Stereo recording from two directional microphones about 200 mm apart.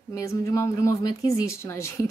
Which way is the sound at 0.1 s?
15° left (ahead or behind).